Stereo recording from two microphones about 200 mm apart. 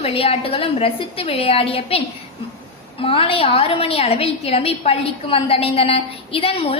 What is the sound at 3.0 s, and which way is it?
A woman's voice, 25° left (ahead or behind).